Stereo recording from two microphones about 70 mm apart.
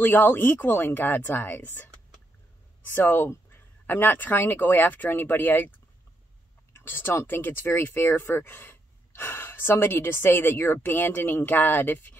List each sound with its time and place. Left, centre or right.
0.0 s speech: left
2.9 s speech: left
6.7 s speech: left